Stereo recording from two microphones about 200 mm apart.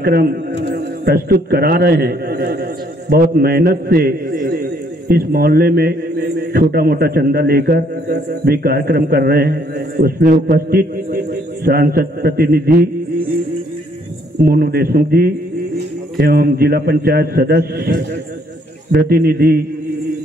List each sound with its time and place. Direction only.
0.0 s a man's voice: 50° right (ahead or behind)
14.4 s a man's voice: 50° right (ahead or behind)